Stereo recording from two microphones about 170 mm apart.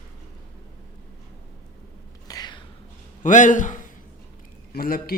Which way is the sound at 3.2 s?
45° left (ahead or behind).